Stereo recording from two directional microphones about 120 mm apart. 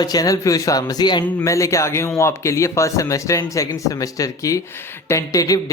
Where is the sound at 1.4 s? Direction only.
25° left (ahead or behind).